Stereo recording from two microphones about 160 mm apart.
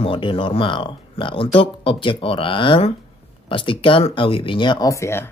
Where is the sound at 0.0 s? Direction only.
30° left (ahead or behind); by 5.3 s 15° left (ahead or behind).